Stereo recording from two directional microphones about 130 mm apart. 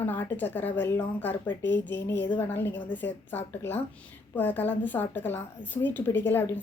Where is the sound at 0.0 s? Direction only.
15° left (ahead or behind).